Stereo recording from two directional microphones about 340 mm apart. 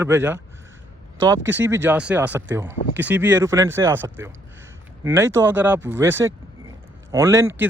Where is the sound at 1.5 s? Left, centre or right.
Centre.